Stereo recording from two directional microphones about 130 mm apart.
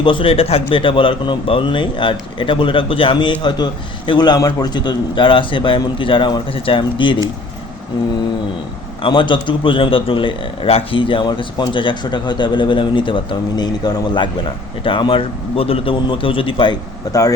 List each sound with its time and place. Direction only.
0.0 s a man's voice: 40° left (ahead or behind)
9.0 s a man's voice: 40° left (ahead or behind)
17.1 s speech: 25° left (ahead or behind)